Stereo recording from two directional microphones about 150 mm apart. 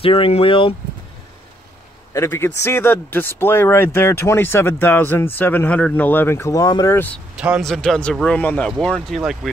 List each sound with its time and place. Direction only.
0.0 s speech: 40° left (ahead or behind)
2.1 s speech: 15° left (ahead or behind)
7.3 s a man's voice: 5° right (ahead or behind)